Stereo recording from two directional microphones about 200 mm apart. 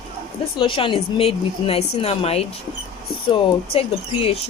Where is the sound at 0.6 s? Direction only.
25° left (ahead or behind).